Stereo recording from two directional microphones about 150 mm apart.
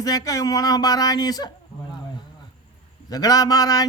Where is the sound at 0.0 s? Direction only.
25° left (ahead or behind).